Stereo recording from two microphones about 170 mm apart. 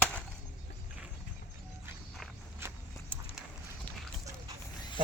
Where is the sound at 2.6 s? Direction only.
15° right (ahead or behind).